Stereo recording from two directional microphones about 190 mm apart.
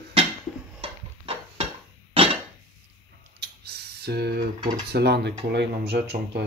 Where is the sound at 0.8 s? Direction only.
30° right (ahead or behind).